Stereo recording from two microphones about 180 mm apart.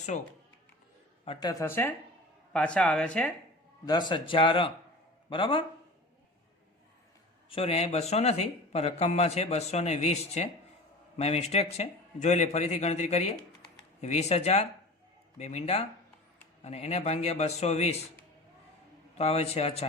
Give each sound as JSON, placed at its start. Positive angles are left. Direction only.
{"t": 1.2, "sound": "a man's voice", "side_deg": 25}
{"t": 4.1, "sound": "a man's voice", "side_deg": 30}
{"t": 7.5, "sound": "speech", "side_deg": 35}
{"t": 19.1, "sound": "speech", "side_deg": 35}